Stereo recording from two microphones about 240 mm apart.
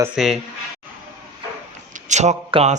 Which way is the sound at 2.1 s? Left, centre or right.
Right.